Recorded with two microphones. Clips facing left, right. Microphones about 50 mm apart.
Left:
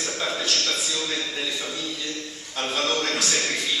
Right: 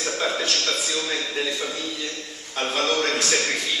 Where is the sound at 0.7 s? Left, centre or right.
Centre.